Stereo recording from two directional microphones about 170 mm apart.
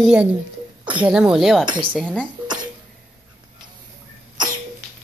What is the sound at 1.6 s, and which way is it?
Speech, 30° right (ahead or behind).